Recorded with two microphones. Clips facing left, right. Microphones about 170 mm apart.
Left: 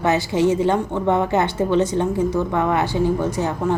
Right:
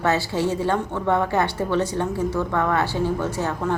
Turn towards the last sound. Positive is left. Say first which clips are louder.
# left 3 dB
turn(degrees=15)  # may be behind; listen again after turning